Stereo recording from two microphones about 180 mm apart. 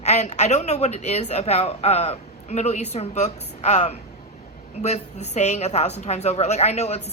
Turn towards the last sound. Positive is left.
turn(degrees=35)  # may be behind; listen again after turning